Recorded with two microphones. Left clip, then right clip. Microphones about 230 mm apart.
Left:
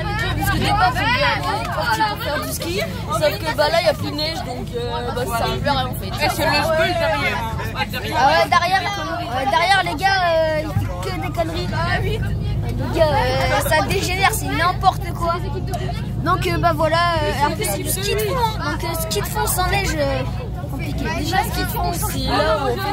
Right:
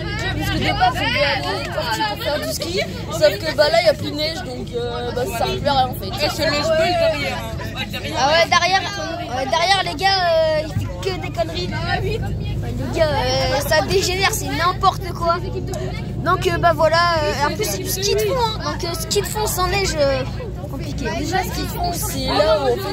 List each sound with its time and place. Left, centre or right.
0.2 s speech: centre
12.9 s speech: centre
19.5 s speech: centre
21.8 s speech: centre